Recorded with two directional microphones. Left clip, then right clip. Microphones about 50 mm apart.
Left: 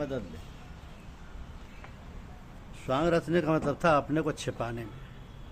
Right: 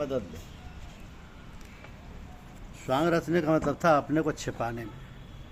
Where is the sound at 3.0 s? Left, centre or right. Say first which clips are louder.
Even; left.